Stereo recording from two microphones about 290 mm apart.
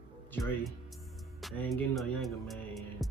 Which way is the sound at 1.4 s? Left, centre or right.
Centre.